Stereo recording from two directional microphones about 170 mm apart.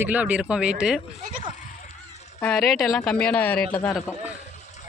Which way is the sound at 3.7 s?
20° left (ahead or behind).